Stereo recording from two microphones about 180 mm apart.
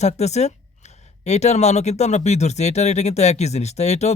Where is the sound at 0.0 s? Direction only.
40° left (ahead or behind).